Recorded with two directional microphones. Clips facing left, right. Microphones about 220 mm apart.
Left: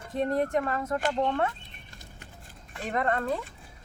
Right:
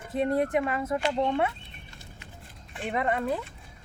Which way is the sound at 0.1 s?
10° right (ahead or behind).